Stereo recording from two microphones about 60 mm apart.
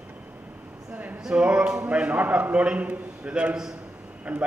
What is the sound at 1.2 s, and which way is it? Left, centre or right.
A man's voice, centre.